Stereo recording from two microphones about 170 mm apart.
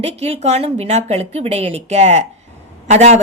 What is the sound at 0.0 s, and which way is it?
A woman's voice, 40° right (ahead or behind).